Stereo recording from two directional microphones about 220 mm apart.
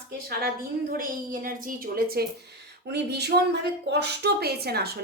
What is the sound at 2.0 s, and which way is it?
A woman's voice, 45° right (ahead or behind).